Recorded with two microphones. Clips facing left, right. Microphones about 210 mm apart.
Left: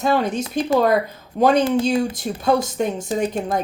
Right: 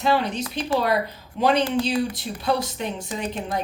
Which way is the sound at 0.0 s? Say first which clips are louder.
Left 3 dB; 45° left (ahead or behind).